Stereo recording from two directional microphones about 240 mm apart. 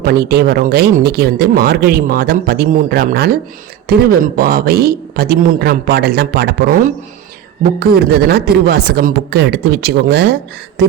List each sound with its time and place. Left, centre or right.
0.0 s speech: right